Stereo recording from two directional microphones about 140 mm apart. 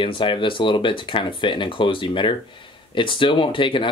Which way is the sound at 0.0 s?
35° left (ahead or behind).